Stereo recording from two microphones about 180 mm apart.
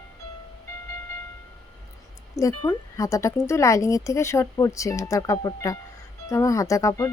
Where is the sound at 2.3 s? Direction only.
20° left (ahead or behind).